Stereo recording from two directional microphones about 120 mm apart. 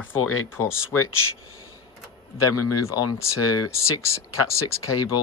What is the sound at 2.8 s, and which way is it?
Speech, 25° left (ahead or behind).